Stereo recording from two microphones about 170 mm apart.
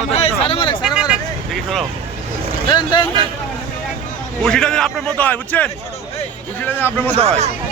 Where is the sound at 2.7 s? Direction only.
25° left (ahead or behind).